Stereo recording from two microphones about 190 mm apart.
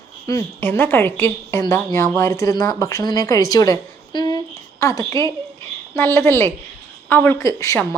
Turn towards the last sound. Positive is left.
turn(degrees=15)  # may be behind; listen again after turning